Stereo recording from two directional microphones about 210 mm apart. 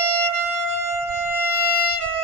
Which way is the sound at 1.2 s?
10° right (ahead or behind).